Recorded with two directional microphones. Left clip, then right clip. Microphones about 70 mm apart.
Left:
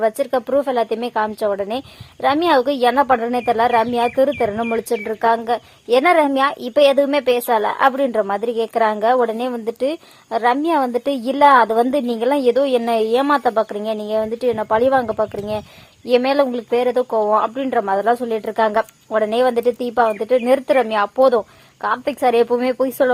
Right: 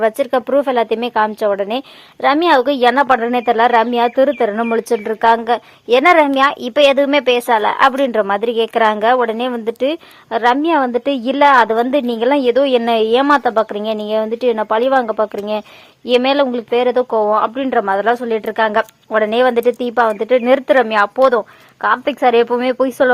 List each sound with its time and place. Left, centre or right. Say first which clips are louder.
0.0 s a woman's voice: right 3 dB; right
11.5 s a woman's voice: right 2 dB; centre
11.9 s a woman's voice: right 3 dB; right